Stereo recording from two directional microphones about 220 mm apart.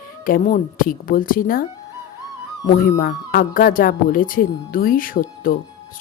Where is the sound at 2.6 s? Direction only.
45° left (ahead or behind).